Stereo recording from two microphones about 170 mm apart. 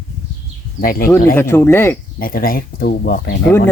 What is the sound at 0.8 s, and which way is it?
Speech, 55° left (ahead or behind).